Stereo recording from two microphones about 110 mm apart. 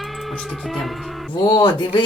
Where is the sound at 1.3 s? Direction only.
45° left (ahead or behind).